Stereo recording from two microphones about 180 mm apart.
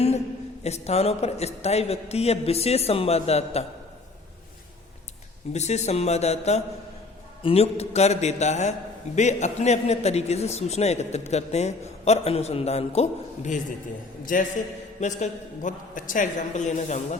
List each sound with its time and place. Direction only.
0.6 s a man's voice: 35° left (ahead or behind)
5.5 s a man's voice: 40° left (ahead or behind)